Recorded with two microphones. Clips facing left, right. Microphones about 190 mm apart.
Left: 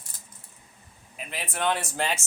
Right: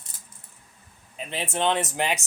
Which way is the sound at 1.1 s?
25° right (ahead or behind).